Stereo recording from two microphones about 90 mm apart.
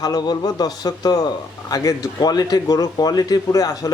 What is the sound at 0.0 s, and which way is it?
Speech, 50° left (ahead or behind).